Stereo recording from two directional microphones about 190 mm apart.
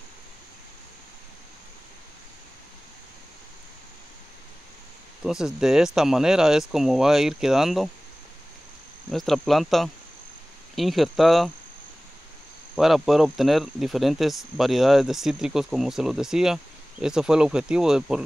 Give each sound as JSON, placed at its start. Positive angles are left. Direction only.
{"t": 5.2, "sound": "speech", "side_deg": -5}
{"t": 9.1, "sound": "speech", "side_deg": 0}
{"t": 12.7, "sound": "speech", "side_deg": 0}